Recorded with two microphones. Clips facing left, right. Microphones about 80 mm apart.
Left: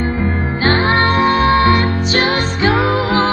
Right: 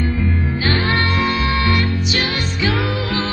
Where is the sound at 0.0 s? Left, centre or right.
Left.